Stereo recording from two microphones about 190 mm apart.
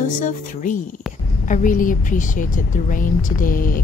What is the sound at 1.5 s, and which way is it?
Speech, 45° left (ahead or behind).